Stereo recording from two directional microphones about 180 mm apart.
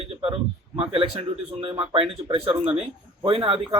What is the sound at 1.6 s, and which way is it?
Speech, 30° right (ahead or behind).